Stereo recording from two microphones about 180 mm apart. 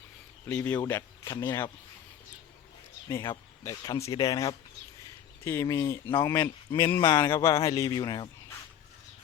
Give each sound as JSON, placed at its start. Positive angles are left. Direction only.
{"t": 0.4, "sound": "speech", "side_deg": 15}
{"t": 3.1, "sound": "a man's voice", "side_deg": 15}